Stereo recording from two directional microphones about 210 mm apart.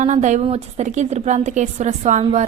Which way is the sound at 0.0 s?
35° right (ahead or behind).